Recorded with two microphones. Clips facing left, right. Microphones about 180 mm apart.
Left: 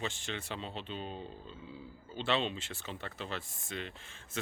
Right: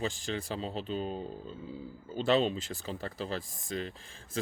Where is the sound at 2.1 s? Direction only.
40° right (ahead or behind).